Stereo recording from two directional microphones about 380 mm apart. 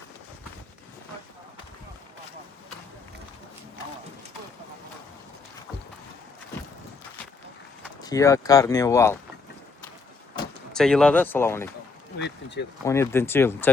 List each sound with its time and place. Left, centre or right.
8.0 s speech: centre
10.3 s speech: centre
12.2 s speech: left
12.8 s speech: centre